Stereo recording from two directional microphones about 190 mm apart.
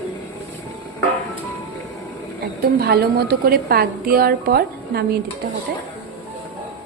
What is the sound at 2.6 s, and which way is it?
A woman's voice, 55° right (ahead or behind).